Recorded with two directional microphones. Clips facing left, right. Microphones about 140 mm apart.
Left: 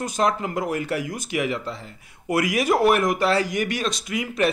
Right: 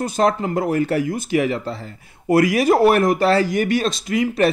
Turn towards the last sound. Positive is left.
turn(degrees=-35)  # may be behind; listen again after turning